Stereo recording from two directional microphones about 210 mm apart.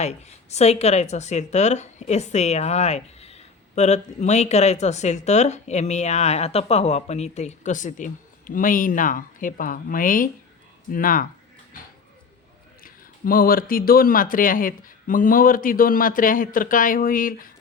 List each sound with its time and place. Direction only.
0.0 s speech: 30° left (ahead or behind)
12.8 s speech: 45° left (ahead or behind)